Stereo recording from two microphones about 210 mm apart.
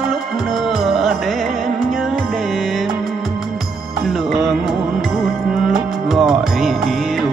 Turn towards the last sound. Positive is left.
turn(degrees=0)  # may be behind; listen again after turning